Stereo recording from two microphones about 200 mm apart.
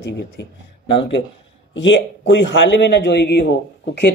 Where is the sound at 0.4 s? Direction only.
60° left (ahead or behind).